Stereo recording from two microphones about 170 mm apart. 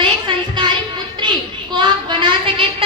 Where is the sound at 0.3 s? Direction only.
25° right (ahead or behind).